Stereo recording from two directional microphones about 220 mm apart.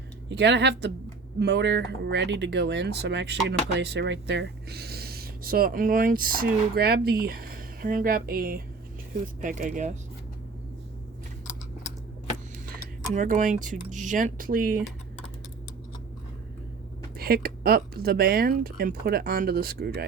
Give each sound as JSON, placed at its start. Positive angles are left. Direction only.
{"t": 0.3, "sound": "speech", "side_deg": -50}
{"t": 13.1, "sound": "speech", "side_deg": -35}
{"t": 17.2, "sound": "speech", "side_deg": -45}